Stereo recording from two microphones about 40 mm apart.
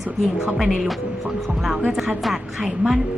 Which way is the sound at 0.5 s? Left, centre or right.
Centre.